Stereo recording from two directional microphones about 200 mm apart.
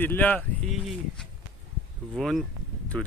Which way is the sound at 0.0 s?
10° left (ahead or behind).